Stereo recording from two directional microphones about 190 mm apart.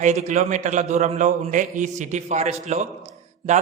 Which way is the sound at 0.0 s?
40° right (ahead or behind).